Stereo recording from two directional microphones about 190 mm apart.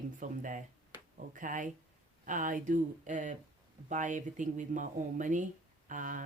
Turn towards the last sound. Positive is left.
turn(degrees=-45)  # may be behind; listen again after turning